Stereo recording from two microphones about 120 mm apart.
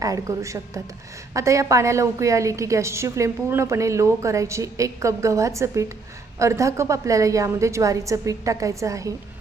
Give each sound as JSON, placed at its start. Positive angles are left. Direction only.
{"t": 0.0, "sound": "a woman's voice", "side_deg": -30}